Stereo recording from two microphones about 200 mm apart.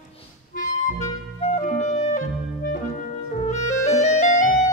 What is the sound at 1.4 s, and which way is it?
Clarinet, 35° left (ahead or behind).